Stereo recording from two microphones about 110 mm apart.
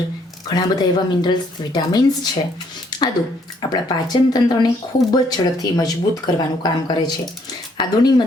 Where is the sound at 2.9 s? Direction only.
40° left (ahead or behind).